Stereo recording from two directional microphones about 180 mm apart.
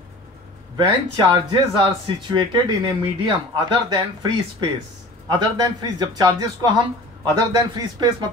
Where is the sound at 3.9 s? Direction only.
25° right (ahead or behind).